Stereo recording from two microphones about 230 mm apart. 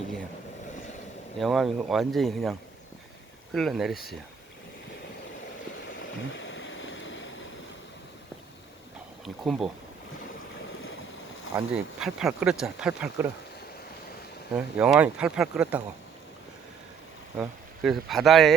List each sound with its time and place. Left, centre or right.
1.4 s speech: centre
6.0 s a sound: left
9.2 s speech: centre
11.5 s speech: centre
14.5 s speech: centre
17.3 s speech: centre